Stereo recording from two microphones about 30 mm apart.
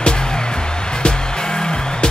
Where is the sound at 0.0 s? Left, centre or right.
Left.